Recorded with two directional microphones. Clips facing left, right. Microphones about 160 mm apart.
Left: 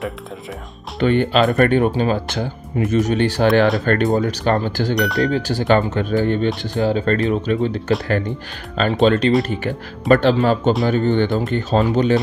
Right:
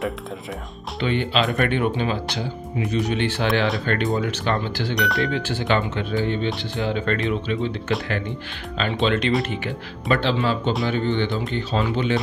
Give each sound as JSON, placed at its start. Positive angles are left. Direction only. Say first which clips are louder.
{"t": 1.0, "sound": "speech", "louder": "left 7 dB", "side_deg": 50}
{"t": 4.9, "sound": "speech", "louder": "left 3 dB", "side_deg": 0}
{"t": 5.2, "sound": "speech", "louder": "left 5 dB", "side_deg": 40}
{"t": 9.0, "sound": "speech", "louder": "left 6 dB", "side_deg": 40}